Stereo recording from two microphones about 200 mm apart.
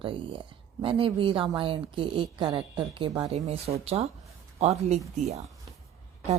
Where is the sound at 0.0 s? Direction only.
25° right (ahead or behind).